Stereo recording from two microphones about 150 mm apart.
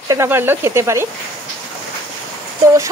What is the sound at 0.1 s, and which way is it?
Speech, 15° right (ahead or behind).